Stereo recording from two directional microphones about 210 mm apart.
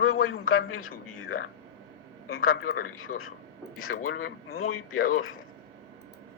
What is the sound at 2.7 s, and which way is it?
Speech, 80° left.